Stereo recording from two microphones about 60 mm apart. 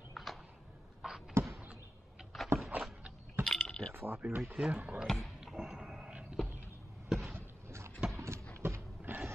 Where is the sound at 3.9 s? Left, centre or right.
Right.